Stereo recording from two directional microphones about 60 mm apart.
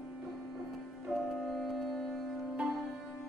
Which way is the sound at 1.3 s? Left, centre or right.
Centre.